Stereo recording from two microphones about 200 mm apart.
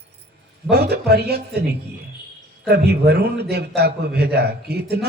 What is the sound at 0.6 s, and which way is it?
Speech, 55° right (ahead or behind).